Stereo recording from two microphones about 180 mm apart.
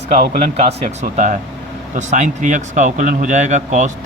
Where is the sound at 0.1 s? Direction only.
40° right (ahead or behind).